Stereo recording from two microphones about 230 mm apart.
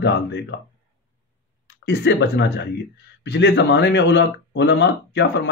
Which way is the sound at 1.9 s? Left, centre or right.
Left.